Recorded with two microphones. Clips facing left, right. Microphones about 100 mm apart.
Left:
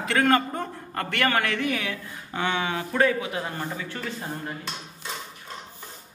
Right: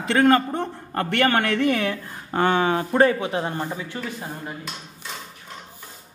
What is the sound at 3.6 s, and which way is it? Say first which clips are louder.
Speech: right 3 dB; 15° right (ahead or behind).